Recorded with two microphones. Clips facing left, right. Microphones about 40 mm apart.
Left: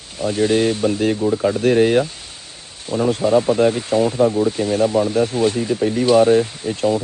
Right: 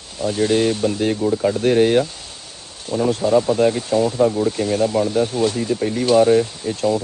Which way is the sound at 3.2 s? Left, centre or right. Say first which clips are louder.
Left 1 dB; left.